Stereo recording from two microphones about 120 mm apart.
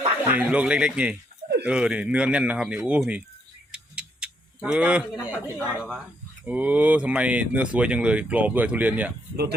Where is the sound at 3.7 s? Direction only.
10° right (ahead or behind).